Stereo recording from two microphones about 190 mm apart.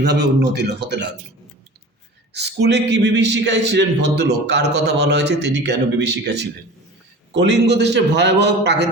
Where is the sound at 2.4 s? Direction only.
60° right (ahead or behind).